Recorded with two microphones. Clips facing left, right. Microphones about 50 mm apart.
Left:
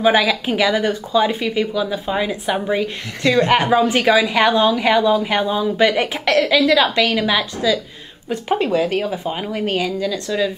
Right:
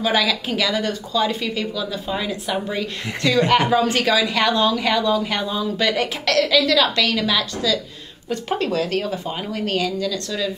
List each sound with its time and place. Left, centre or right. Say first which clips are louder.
0.0 s a woman's voice: left 5 dB; left